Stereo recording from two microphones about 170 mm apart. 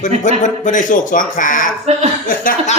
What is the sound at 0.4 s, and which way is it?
Speech, 50° left (ahead or behind).